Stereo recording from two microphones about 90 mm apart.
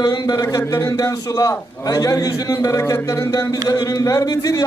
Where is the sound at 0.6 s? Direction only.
30° left (ahead or behind).